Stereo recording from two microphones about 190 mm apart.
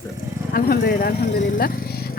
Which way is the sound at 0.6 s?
50° left (ahead or behind).